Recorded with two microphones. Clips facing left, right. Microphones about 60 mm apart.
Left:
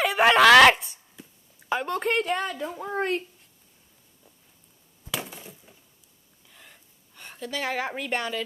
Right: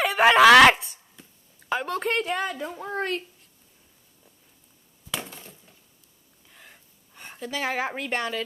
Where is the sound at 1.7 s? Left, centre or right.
Centre.